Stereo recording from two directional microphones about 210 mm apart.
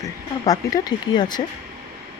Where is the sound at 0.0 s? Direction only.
15° left (ahead or behind).